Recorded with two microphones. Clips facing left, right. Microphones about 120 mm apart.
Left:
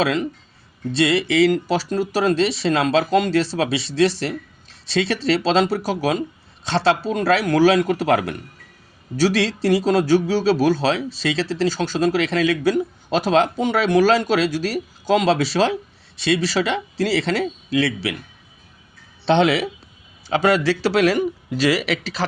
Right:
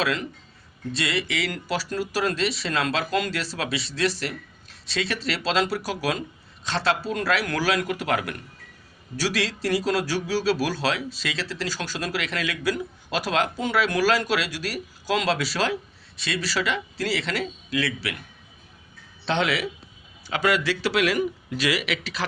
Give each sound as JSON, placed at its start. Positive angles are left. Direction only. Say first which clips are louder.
{"t": 0.0, "sound": "a man's voice", "louder": "left 6 dB", "side_deg": 20}
{"t": 19.2, "sound": "a man's voice", "louder": "left 8 dB", "side_deg": 25}